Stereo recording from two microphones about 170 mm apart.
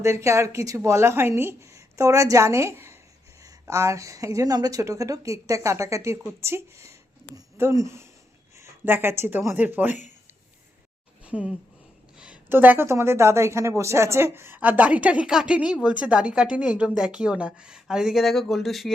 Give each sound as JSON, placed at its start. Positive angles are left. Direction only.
{"t": 0.0, "sound": "a woman's voice", "side_deg": -15}
{"t": 11.2, "sound": "a sound", "side_deg": -5}
{"t": 12.1, "sound": "a woman's voice", "side_deg": -5}